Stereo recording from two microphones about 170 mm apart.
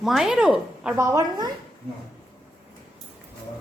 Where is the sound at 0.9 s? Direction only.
20° right (ahead or behind).